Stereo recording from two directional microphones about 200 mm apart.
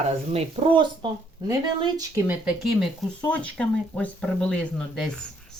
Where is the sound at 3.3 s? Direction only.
5° left (ahead or behind).